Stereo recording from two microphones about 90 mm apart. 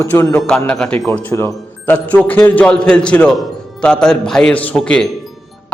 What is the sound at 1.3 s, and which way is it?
Speech, 30° left (ahead or behind).